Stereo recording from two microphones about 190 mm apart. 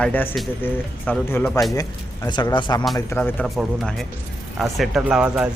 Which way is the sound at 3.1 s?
10° left (ahead or behind).